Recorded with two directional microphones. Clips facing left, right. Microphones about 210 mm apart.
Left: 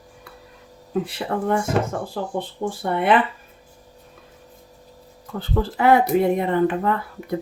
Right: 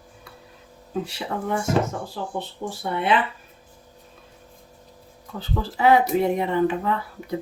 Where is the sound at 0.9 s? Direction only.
55° left (ahead or behind).